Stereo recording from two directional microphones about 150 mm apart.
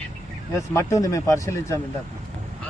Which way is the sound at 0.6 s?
20° left (ahead or behind).